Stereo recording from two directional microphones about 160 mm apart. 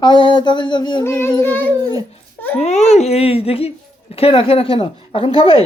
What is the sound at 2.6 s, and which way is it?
Speech, 45° left (ahead or behind).